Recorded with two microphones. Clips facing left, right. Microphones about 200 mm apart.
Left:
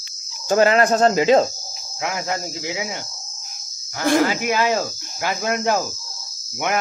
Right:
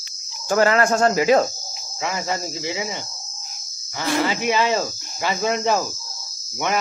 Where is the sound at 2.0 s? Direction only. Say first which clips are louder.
Even; 10° left (ahead or behind).